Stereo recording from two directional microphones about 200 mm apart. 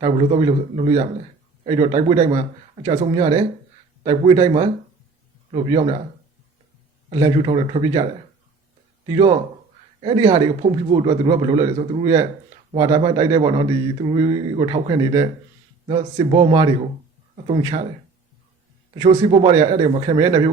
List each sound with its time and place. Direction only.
0.0 s speech: 25° right (ahead or behind)
7.1 s speech: 20° right (ahead or behind)
9.0 s speech: 25° right (ahead or behind)
19.2 s speech: 25° right (ahead or behind)